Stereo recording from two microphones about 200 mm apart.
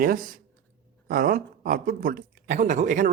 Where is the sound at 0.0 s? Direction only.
45° right (ahead or behind).